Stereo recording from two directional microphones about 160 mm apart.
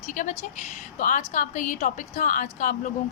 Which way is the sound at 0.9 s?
50° left (ahead or behind).